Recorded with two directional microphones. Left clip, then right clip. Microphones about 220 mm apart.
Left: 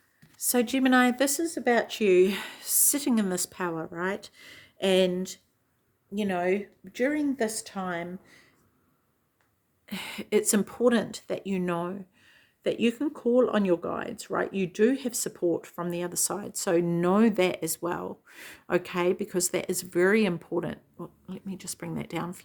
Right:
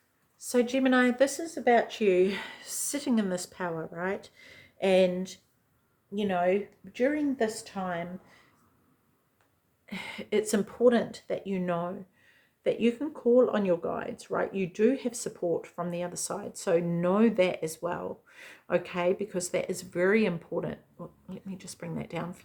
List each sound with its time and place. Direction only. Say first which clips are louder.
0.3 s speech: even; 45° left (ahead or behind)
9.8 s speech: left 2 dB; 45° left (ahead or behind)